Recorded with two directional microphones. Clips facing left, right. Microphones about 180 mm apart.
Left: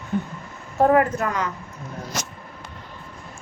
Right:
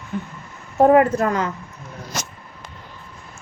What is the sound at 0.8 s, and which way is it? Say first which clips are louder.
Speech: right 4 dB; 25° right (ahead or behind).